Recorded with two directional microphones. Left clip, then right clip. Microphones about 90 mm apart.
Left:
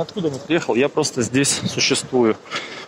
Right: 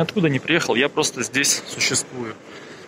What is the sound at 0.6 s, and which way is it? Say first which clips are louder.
Speech: left 1 dB; 30° left (ahead or behind).